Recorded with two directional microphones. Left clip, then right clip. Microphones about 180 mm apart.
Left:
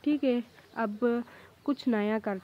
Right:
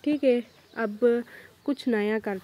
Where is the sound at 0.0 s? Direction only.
Centre (ahead or behind).